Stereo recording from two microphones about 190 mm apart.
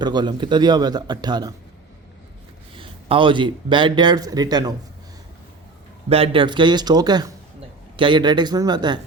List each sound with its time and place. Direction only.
0.0 s speech: 20° right (ahead or behind)
2.7 s speech: 25° right (ahead or behind)
6.1 s speech: 30° right (ahead or behind)